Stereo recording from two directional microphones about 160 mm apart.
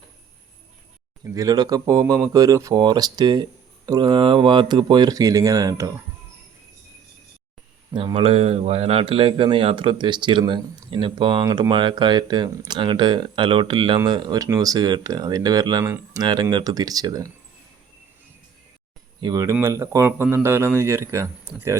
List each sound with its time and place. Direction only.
1.2 s speech: 20° right (ahead or behind)
7.9 s speech: 35° right (ahead or behind)
19.2 s speech: 25° right (ahead or behind)